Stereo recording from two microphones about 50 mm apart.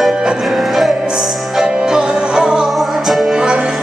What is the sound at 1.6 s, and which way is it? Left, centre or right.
Music, centre.